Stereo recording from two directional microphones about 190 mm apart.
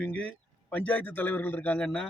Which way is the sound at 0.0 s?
5° left (ahead or behind).